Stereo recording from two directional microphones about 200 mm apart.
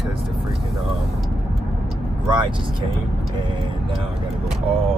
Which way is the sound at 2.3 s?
25° right (ahead or behind).